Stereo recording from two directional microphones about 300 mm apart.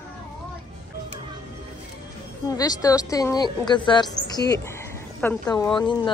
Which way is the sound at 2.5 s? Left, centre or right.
Centre.